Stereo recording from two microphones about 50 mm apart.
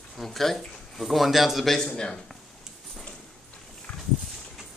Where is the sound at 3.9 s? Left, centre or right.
Left.